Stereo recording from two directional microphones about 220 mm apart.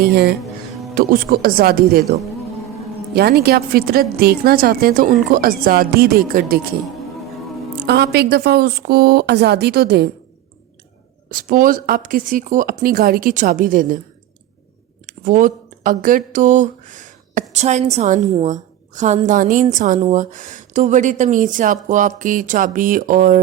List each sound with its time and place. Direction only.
0.0 s a woman's voice: 45° right (ahead or behind)
3.2 s a woman's voice: 45° right (ahead or behind)
7.9 s a woman's voice: 50° right (ahead or behind)
11.3 s a woman's voice: 40° right (ahead or behind)
15.0 s a sound: 35° right (ahead or behind)
17.5 s a woman's voice: 30° right (ahead or behind)